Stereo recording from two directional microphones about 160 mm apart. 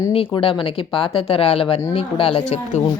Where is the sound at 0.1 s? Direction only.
35° left (ahead or behind).